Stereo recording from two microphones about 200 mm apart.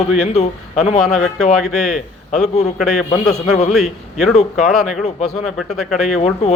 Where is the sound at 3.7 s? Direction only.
Centre (ahead or behind).